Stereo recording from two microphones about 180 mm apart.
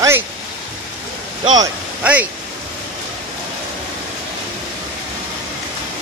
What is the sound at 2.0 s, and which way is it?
Speech, 10° right (ahead or behind).